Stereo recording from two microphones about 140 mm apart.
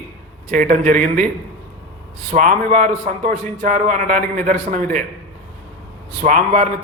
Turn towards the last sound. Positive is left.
turn(degrees=-65)  # may be behind; listen again after turning